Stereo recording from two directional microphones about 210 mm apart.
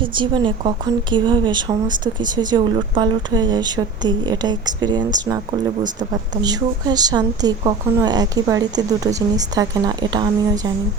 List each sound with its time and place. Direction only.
0.0 s speech: 20° right (ahead or behind)
5.8 s speech: 35° right (ahead or behind)
6.4 s speech: 20° right (ahead or behind)